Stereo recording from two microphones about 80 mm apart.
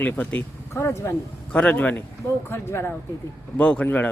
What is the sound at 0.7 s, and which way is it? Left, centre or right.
Speech, left.